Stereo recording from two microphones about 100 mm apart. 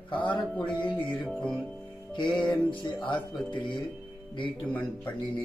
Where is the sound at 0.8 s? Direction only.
15° left (ahead or behind).